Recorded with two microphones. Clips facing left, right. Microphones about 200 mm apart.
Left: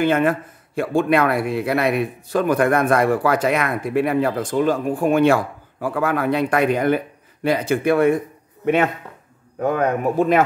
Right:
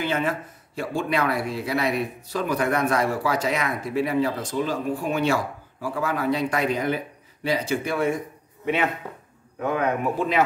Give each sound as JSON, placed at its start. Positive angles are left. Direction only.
{"t": 0.0, "sound": "speech", "side_deg": 55}